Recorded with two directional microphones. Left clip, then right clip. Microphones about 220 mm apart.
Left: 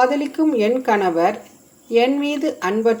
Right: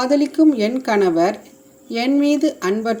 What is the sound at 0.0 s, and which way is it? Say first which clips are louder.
Speech: right 2 dB; 30° right (ahead or behind).